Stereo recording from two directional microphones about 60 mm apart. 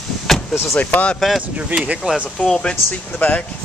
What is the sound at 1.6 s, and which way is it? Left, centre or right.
Speech, right.